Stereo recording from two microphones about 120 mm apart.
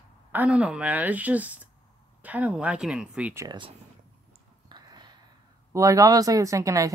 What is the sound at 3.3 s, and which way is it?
Speech, 30° right (ahead or behind).